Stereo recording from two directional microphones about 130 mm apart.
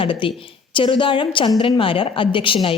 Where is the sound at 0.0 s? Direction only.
40° left (ahead or behind).